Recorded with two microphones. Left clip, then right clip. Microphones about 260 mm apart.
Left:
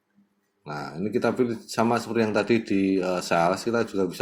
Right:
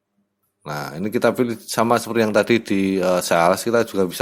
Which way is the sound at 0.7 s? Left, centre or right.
Right.